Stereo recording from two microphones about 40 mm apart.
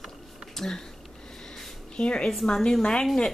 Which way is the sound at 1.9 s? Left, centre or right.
Left.